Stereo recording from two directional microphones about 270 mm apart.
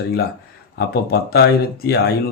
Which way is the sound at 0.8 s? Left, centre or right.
Left.